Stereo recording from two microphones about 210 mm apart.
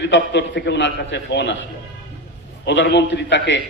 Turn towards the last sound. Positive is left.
turn(degrees=60)  # may be behind; listen again after turning